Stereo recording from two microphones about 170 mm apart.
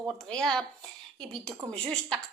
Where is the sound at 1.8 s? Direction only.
5° left (ahead or behind).